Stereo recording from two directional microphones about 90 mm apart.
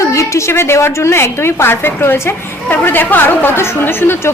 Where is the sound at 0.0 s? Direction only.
35° left (ahead or behind).